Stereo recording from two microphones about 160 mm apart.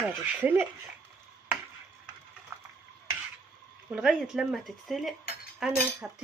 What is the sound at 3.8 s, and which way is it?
Speech, 5° right (ahead or behind).